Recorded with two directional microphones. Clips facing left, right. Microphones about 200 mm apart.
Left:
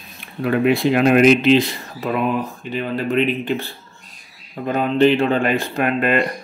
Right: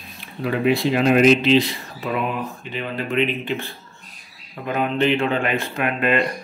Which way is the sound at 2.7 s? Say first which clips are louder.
Left 5 dB; 40° left (ahead or behind).